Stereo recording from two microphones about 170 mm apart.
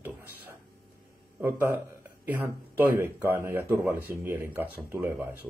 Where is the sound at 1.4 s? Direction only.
10° right (ahead or behind).